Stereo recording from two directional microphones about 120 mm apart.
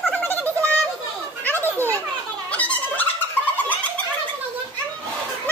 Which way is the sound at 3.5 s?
15° left (ahead or behind).